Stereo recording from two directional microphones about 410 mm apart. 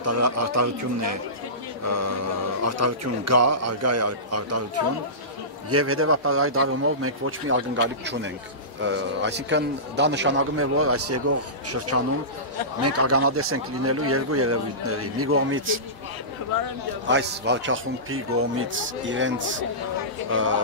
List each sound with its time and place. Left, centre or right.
0.0 s speech: right
1.9 s speech: right
5.7 s a man's voice: right
17.1 s a man's voice: right